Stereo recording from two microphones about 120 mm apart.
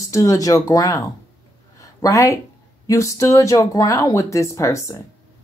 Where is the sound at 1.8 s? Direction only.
30° left (ahead or behind).